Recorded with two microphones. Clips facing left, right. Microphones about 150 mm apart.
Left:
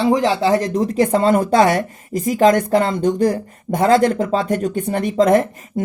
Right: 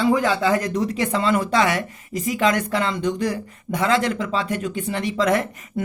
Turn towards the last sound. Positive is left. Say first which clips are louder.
# left 6 dB
turn(degrees=45)  # may be behind; listen again after turning